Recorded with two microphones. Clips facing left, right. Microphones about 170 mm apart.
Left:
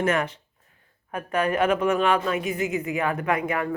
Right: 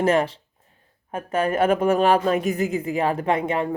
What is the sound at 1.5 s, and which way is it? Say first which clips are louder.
Speech: right 3 dB; 45° right (ahead or behind).